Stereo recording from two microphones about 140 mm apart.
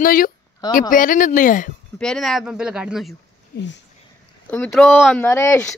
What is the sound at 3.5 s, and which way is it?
Speech, 90° left.